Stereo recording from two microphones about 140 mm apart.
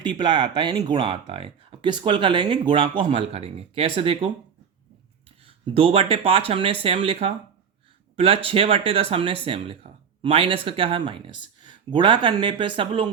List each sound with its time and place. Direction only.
0.0 s speech: 35° right (ahead or behind)
5.5 s speech: 45° right (ahead or behind)